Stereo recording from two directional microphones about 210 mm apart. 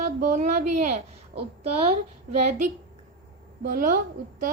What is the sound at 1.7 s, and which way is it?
Speech, 30° right (ahead or behind).